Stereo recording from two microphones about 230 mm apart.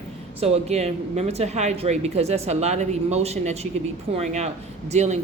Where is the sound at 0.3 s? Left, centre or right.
Right.